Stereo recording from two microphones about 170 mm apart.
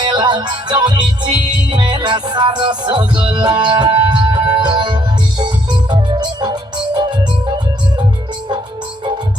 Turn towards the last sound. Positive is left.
turn(degrees=-25)  # may be behind; listen again after turning